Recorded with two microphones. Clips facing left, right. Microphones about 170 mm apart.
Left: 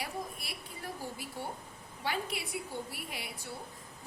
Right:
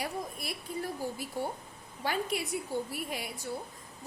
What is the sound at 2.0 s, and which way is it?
A woman's voice, 45° right (ahead or behind).